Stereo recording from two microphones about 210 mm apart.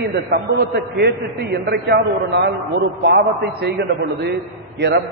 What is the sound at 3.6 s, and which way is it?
A man's voice, 55° right (ahead or behind).